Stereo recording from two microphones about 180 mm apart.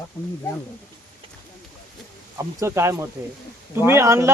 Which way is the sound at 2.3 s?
15° right (ahead or behind).